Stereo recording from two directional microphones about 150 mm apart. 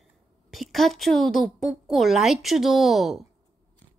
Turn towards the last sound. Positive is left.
turn(degrees=0)  # may be behind; listen again after turning